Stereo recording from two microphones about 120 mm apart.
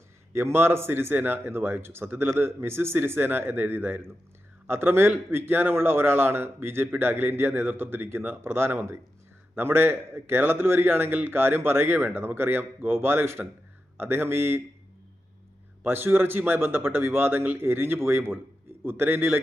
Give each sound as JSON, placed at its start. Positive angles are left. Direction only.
{"t": 0.3, "sound": "a man's voice", "side_deg": -20}
{"t": 15.8, "sound": "a man's voice", "side_deg": -20}